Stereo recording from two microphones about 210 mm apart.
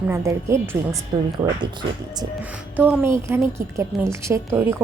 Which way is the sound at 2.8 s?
5° right (ahead or behind).